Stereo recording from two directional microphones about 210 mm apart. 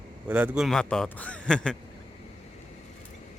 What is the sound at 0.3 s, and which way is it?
A man's voice, 5° right (ahead or behind).